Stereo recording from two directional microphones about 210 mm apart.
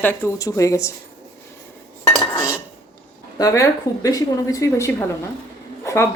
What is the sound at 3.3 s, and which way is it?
Speech, 15° left (ahead or behind).